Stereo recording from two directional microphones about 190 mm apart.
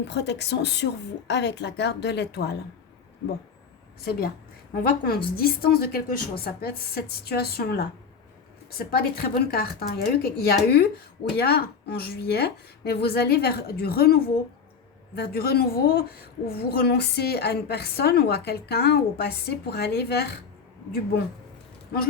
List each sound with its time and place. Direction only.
0.0 s a woman's voice: 65° left (ahead or behind)
4.0 s a woman's voice: 50° left (ahead or behind)